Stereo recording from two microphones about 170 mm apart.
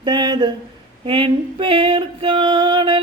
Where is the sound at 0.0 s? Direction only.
25° right (ahead or behind).